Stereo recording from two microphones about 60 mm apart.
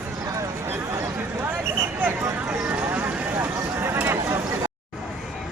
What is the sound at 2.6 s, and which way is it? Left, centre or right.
Clip-clop, right.